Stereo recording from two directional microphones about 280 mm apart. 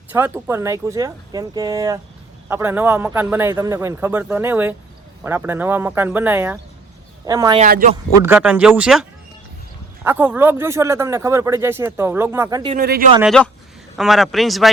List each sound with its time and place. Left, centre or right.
0.1 s speech: centre
7.6 s a man's voice: right
8.2 s speech: centre
12.7 s speech: right
13.2 s speech: centre